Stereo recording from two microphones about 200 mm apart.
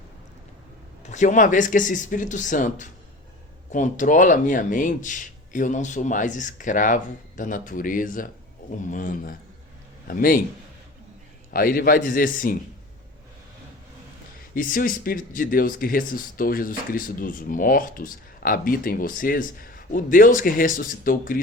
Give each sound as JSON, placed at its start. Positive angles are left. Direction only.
{"t": 1.0, "sound": "speech", "side_deg": 35}
{"t": 11.5, "sound": "speech", "side_deg": 45}
{"t": 14.5, "sound": "speech", "side_deg": 45}